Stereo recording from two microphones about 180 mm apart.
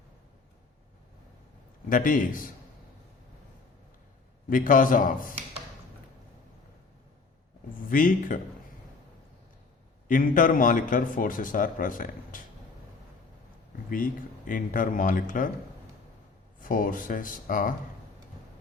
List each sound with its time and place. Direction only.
1.9 s a man's voice: 50° left (ahead or behind)
4.4 s a man's voice: 50° left (ahead or behind)
7.9 s a man's voice: 50° left (ahead or behind)
10.1 s a man's voice: 50° left (ahead or behind)
13.9 s a man's voice: 50° left (ahead or behind)
16.6 s a man's voice: 50° left (ahead or behind)